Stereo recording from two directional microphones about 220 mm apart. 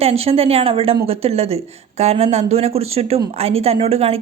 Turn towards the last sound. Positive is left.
turn(degrees=-25)  # may be behind; listen again after turning